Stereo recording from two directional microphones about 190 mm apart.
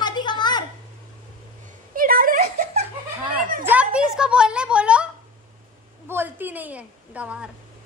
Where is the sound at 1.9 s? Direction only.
50° right (ahead or behind).